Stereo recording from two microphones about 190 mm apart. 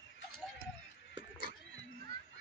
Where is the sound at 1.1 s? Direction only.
25° right (ahead or behind).